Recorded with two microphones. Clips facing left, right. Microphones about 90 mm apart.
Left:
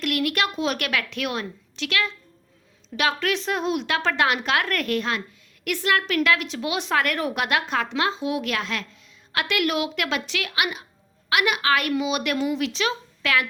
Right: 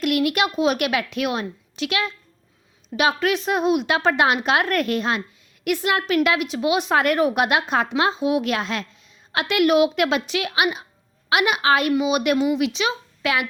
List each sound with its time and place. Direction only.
0.0 s a woman's voice: 20° right (ahead or behind)
12.5 s speech: 10° right (ahead or behind)